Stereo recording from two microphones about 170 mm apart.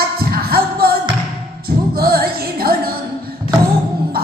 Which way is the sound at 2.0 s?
65° right (ahead or behind).